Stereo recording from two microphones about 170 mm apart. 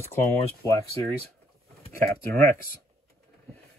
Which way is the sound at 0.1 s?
20° left (ahead or behind).